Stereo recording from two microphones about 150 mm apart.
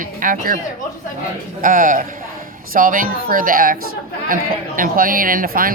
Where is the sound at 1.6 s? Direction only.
65° right (ahead or behind).